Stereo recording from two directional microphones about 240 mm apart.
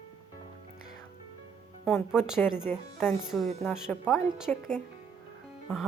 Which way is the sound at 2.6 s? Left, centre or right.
Centre.